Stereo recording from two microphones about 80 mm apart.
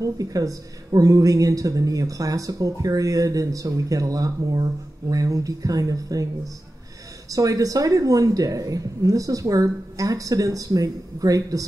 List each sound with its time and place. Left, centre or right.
0.0 s a woman's voice: right
7.2 s a woman's voice: right